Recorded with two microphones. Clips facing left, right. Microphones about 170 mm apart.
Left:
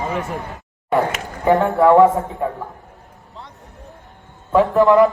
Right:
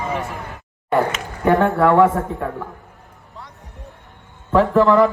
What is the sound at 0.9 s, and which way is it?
Speech, centre (ahead or behind).